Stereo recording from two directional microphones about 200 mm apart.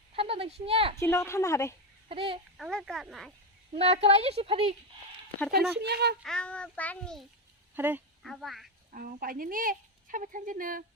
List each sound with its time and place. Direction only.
0.2 s a sound: 30° right (ahead or behind)
0.6 s speech: 30° right (ahead or behind)
0.9 s a woman's voice: 15° left (ahead or behind)
2.0 s speech: 30° right (ahead or behind)
2.6 s a child's voice: centre (ahead or behind)
3.7 s speech: 30° right (ahead or behind)
5.7 s speech: 55° right (ahead or behind)
6.2 s a child's voice: 5° left (ahead or behind)
7.8 s speech: 10° right (ahead or behind)
8.2 s a child's voice: centre (ahead or behind)
8.9 s speech: 45° right (ahead or behind)